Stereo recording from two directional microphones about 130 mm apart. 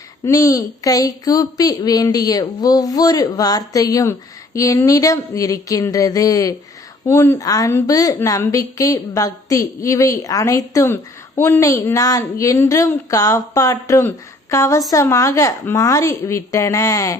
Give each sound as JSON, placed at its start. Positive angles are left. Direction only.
{"t": 0.3, "sound": "a woman's voice", "side_deg": 25}